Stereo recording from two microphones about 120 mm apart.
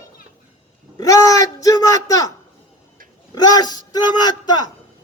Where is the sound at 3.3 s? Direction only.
35° left (ahead or behind).